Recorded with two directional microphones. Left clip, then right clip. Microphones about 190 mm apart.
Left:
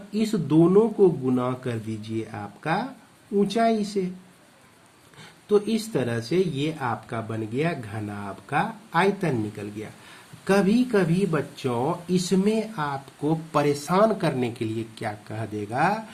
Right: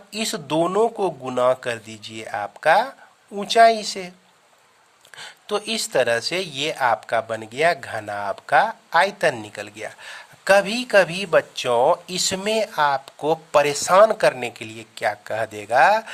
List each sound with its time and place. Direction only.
0.1 s speech: 55° right (ahead or behind)
5.1 s speech: 55° right (ahead or behind)